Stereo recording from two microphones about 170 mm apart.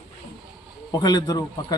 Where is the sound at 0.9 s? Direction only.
25° left (ahead or behind).